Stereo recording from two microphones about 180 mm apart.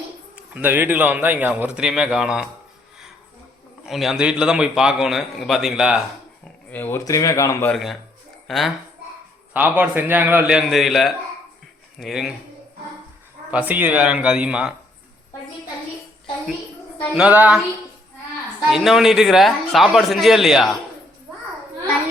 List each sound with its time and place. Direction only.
0.3 s a man's voice: 10° right (ahead or behind)
3.8 s a man's voice: centre (ahead or behind)
6.7 s speech: 10° left (ahead or behind)
7.7 s a man's voice: centre (ahead or behind)
9.5 s a man's voice: 10° right (ahead or behind)
13.5 s a man's voice: 10° right (ahead or behind)
17.2 s a man's voice: 10° right (ahead or behind)
18.7 s a man's voice: centre (ahead or behind)